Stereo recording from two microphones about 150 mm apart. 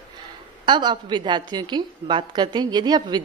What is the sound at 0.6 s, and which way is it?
A woman's voice, 30° right (ahead or behind).